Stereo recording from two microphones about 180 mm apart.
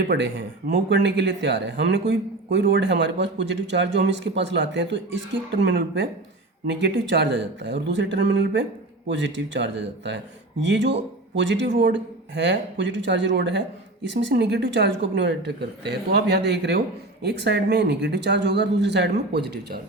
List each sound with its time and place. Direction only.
0.0 s a man's voice: 75° right (ahead or behind)
9.0 s a man's voice: 85° right; by 19.8 s 70° right (ahead or behind)